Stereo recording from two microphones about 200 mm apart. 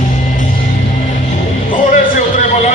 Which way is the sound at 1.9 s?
40° left (ahead or behind).